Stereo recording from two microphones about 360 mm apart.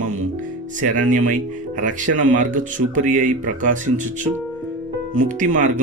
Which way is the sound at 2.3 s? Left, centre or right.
Right.